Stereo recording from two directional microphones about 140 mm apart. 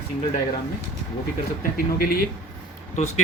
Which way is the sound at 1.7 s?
90° left.